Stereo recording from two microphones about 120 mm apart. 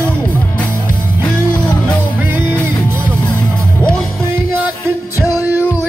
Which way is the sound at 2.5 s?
25° left (ahead or behind).